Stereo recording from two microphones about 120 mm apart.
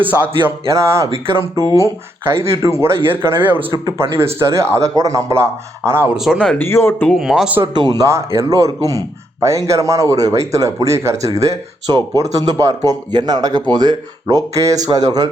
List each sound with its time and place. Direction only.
0.0 s music: 15° right (ahead or behind)
0.7 s speech: 25° right (ahead or behind)
2.3 s speech: 25° right (ahead or behind)
6.1 s speech: 5° right (ahead or behind)
6.6 s speech: 20° left (ahead or behind)
7.2 s speech: 5° right (ahead or behind)
7.6 s speech: 40° right (ahead or behind)